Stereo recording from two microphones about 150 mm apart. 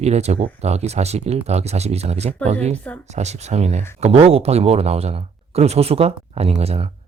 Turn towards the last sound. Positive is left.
turn(degrees=-45)  # may be behind; listen again after turning